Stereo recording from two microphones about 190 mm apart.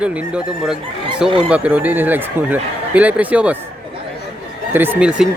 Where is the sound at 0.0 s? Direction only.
5° right (ahead or behind).